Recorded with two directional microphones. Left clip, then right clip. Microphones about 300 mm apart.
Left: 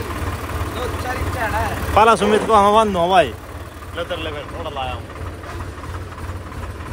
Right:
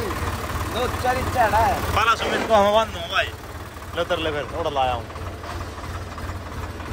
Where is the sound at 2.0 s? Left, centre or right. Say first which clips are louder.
Left 9 dB; centre.